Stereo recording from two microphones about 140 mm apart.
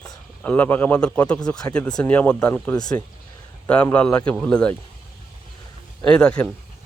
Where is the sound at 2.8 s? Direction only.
30° left (ahead or behind).